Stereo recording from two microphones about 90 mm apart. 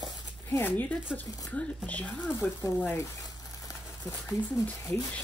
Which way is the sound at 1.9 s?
15° left (ahead or behind).